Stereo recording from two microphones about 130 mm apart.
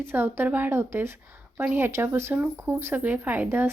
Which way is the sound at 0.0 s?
15° right (ahead or behind).